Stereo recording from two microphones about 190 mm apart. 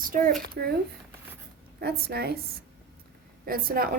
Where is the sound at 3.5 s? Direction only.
50° right (ahead or behind).